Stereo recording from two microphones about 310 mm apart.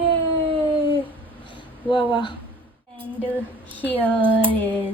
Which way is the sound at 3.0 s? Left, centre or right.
Centre.